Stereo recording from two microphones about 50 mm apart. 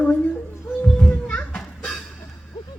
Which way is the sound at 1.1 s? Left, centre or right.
Left.